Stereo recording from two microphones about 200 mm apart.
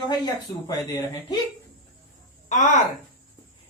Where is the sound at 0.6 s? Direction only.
15° left (ahead or behind).